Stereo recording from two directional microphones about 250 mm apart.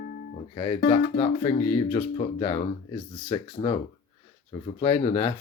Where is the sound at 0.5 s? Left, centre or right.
Centre.